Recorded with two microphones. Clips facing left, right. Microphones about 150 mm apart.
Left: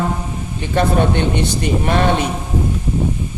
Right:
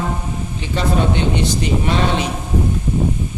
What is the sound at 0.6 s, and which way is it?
A man's voice, 55° left (ahead or behind).